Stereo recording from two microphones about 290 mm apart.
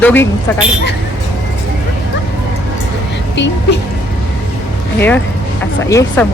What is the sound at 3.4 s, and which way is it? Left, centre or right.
Speech, left.